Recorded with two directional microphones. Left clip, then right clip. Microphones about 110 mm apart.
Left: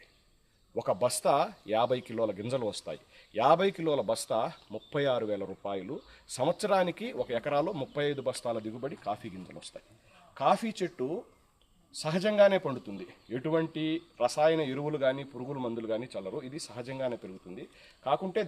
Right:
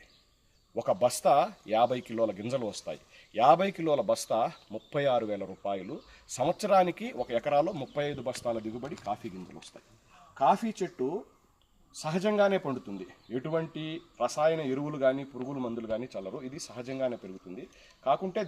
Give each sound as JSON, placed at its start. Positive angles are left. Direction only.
{"t": 0.8, "sound": "speech", "side_deg": 30}